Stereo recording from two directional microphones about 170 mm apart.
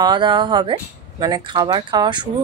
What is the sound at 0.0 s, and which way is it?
Speech, 25° right (ahead or behind).